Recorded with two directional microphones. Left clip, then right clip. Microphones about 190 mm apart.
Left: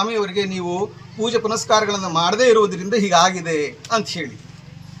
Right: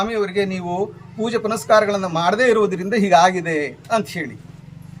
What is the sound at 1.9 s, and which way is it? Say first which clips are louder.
Speech: even; 45° right (ahead or behind).